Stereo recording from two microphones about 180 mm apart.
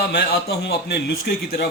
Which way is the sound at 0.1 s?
65° left (ahead or behind).